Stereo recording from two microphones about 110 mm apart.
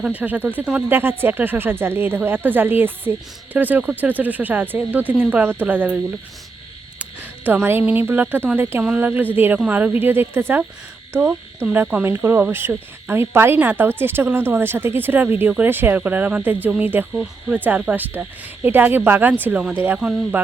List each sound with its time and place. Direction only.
0.1 s speech: 15° right (ahead or behind)
7.0 s speech: 15° right (ahead or behind)
20.0 s speech: 5° right (ahead or behind)